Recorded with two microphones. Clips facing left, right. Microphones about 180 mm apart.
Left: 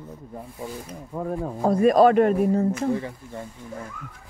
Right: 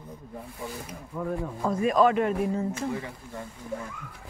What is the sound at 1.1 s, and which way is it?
Speech, 40° left (ahead or behind).